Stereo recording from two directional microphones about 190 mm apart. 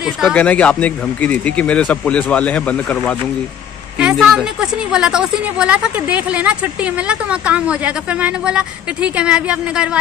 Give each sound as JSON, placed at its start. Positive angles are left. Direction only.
{"t": 0.0, "sound": "a woman's voice", "side_deg": 5}